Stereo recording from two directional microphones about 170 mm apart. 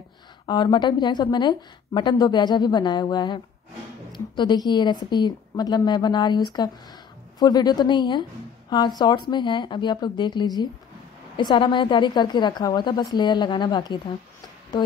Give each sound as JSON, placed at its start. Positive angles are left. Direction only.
{"t": 0.5, "sound": "a woman's voice", "side_deg": 25}